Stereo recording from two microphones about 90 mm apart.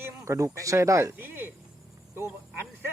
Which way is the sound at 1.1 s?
25° right (ahead or behind).